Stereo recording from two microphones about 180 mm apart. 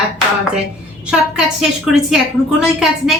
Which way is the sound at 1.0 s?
5° right (ahead or behind).